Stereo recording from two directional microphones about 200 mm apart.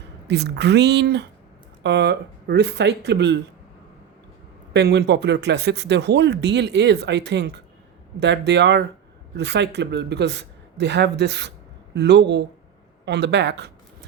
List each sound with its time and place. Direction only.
0.3 s speech: 55° right (ahead or behind)
4.7 s speech: 55° right (ahead or behind)